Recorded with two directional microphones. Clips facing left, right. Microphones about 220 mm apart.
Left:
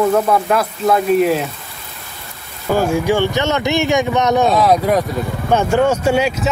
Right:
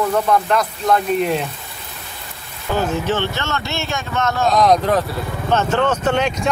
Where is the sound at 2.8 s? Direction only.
10° left (ahead or behind).